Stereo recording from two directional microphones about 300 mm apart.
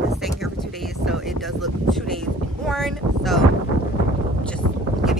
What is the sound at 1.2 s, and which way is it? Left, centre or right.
Boat, centre.